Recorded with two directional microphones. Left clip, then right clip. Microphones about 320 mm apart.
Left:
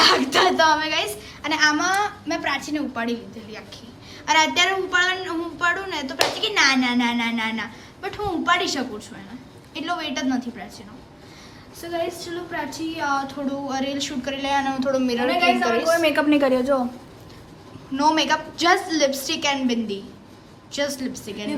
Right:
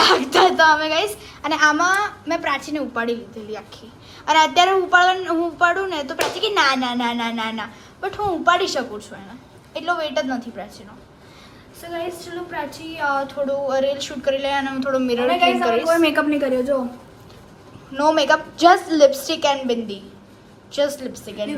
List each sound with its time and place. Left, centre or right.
0.0 s a woman's voice: centre
11.8 s speech: centre
17.9 s speech: centre